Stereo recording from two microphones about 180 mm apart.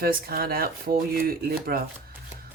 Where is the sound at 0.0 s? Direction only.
55° right (ahead or behind).